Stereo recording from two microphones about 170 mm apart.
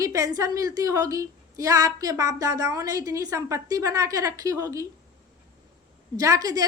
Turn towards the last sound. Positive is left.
turn(degrees=-20)  # may be behind; listen again after turning